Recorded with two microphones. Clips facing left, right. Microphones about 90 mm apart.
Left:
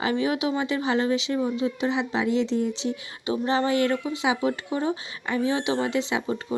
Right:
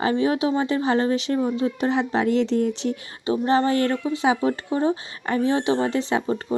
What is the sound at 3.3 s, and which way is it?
Speech, 40° right (ahead or behind).